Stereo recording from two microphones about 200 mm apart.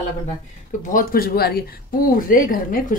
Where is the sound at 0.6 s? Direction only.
45° left (ahead or behind).